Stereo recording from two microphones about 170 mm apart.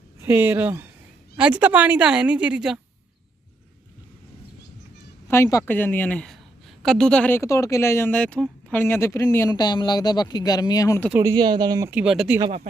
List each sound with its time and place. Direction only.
0.2 s a woman's voice: 15° right (ahead or behind)
5.3 s speech: 15° left (ahead or behind)
11.2 s speech: 20° right (ahead or behind)
11.9 s a woman's voice: 5° right (ahead or behind)